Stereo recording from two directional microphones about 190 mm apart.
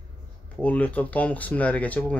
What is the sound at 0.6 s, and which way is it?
Speech, 5° left (ahead or behind).